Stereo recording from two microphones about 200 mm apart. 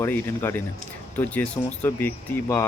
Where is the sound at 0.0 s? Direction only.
10° left (ahead or behind).